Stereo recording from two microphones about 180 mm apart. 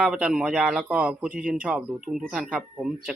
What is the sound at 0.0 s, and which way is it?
Speech, 5° right (ahead or behind).